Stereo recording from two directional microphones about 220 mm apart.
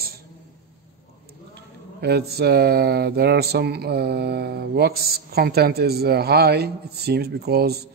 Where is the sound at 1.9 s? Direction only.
45° right (ahead or behind).